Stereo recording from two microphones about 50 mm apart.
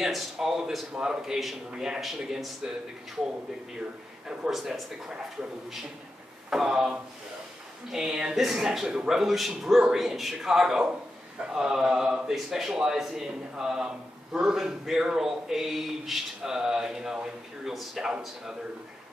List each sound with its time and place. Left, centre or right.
0.0 s a man's voice: centre
1.7 s a man's voice: centre
4.5 s a man's voice: centre
6.5 s a man's voice: centre